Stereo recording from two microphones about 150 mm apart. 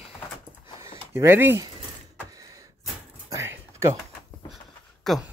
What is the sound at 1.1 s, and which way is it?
Speech, 15° right (ahead or behind).